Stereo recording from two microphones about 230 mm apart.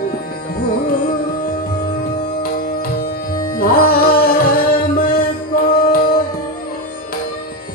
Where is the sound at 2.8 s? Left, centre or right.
Left.